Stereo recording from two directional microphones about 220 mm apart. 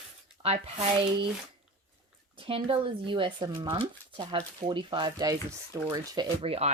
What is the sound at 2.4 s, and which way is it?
Speech, 25° right (ahead or behind).